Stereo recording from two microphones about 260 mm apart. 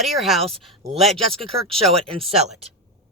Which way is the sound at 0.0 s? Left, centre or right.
Centre.